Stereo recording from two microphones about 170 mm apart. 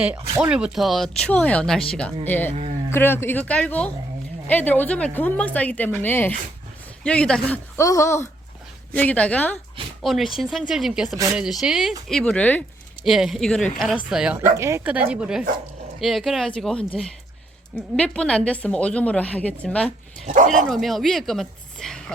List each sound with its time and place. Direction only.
0.3 s a woman's voice: 5° right (ahead or behind); by 12.6 s 10° left (ahead or behind)
13.1 s speech: centre (ahead or behind)
14.5 s a woman's voice: 15° right (ahead or behind); by 19.9 s 5° left (ahead or behind)
20.2 s speech: 50° right (ahead or behind)
20.5 s speech: centre (ahead or behind)